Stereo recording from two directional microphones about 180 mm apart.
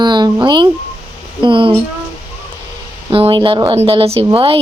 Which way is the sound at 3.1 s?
30° right (ahead or behind).